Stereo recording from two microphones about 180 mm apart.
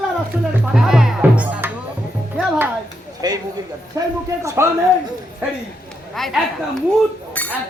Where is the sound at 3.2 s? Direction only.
20° right (ahead or behind).